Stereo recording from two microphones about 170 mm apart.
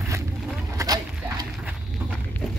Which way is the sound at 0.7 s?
20° right (ahead or behind).